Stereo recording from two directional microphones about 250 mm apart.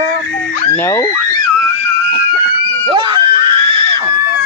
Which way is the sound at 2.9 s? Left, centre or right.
Centre.